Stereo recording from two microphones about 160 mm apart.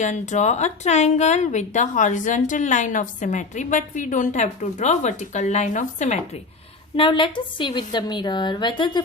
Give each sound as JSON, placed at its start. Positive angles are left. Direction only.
{"t": 0.0, "sound": "speech", "side_deg": 50}
{"t": 6.9, "sound": "a woman's voice", "side_deg": 30}